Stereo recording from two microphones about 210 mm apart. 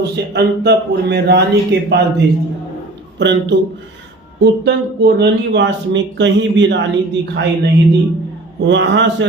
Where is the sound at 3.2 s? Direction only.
55° right (ahead or behind).